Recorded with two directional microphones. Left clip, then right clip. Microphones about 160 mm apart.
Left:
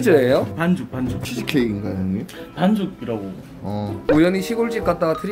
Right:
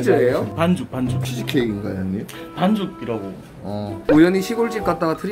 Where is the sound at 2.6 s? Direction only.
10° right (ahead or behind).